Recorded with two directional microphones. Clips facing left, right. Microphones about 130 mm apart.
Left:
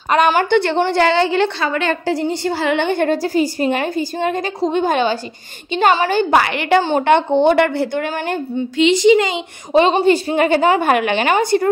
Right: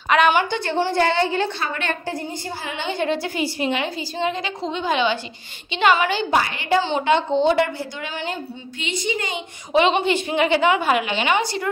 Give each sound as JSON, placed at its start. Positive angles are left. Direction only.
{"t": 0.1, "sound": "a woman's voice", "side_deg": 40}
{"t": 0.5, "sound": "a woman's voice", "side_deg": 70}
{"t": 3.2, "sound": "a woman's voice", "side_deg": 40}
{"t": 6.3, "sound": "a woman's voice", "side_deg": 75}
{"t": 6.8, "sound": "a woman's voice", "side_deg": 55}
{"t": 9.8, "sound": "a woman's voice", "side_deg": 35}